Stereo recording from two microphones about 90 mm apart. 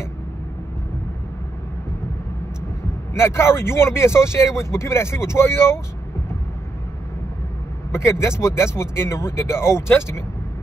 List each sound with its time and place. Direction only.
3.2 s speech: 30° left (ahead or behind)
7.9 s speech: 30° left (ahead or behind)